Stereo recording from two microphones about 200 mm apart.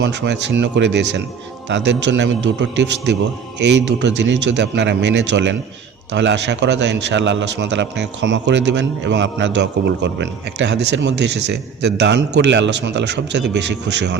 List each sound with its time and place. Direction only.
0.0 s a man's voice: 60° right (ahead or behind)